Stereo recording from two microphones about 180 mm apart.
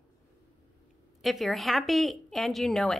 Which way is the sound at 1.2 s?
Centre (ahead or behind).